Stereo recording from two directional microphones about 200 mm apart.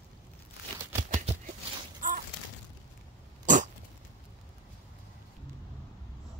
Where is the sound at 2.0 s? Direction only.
40° right (ahead or behind).